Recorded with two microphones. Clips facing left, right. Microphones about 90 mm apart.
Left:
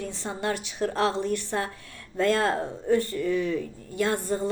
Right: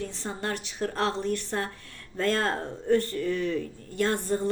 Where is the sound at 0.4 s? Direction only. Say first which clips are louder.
Left 4 dB; 20° left (ahead or behind).